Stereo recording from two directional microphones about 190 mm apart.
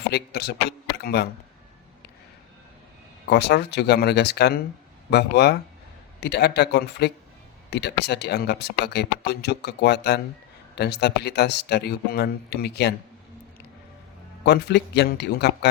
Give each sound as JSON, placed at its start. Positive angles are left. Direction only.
{"t": 0.1, "sound": "speech", "side_deg": 60}
{"t": 3.2, "sound": "speech", "side_deg": 60}
{"t": 14.4, "sound": "speech", "side_deg": 60}